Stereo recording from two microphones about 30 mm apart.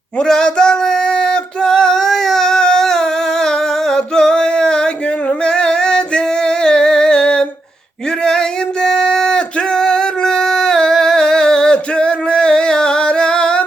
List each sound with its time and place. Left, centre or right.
0.3 s female singing: left
5.5 s music: left
8.2 s singing: left